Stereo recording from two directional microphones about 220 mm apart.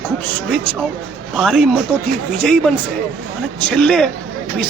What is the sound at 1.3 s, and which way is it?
Speech, centre (ahead or behind).